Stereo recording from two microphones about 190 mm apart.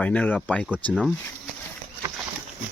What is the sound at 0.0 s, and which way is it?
Speech, 5° left (ahead or behind).